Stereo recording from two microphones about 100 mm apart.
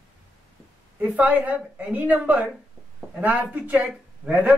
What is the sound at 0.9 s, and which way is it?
A man's voice, 15° right (ahead or behind).